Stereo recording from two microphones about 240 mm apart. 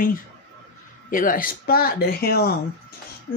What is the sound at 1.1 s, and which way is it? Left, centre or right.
Speech, left.